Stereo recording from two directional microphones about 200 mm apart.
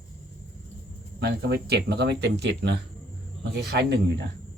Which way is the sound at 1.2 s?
50° right (ahead or behind).